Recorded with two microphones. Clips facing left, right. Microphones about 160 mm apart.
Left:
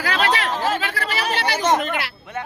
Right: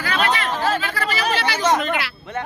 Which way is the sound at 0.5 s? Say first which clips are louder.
Right 1 dB; 20° left (ahead or behind).